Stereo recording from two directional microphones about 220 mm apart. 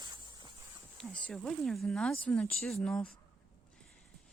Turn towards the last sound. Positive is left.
turn(degrees=5)  # may be behind; listen again after turning